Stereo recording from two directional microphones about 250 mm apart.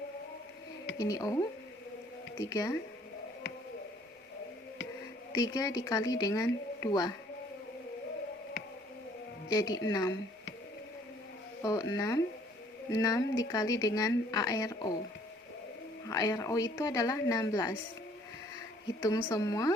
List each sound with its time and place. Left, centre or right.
0.9 s speech: centre
2.4 s speech: centre
5.3 s speech: centre
9.5 s speech: centre
11.6 s speech: centre
16.0 s speech: centre
19.0 s speech: centre